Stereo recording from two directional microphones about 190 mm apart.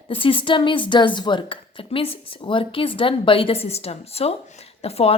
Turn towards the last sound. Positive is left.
turn(degrees=30)  # may be behind; listen again after turning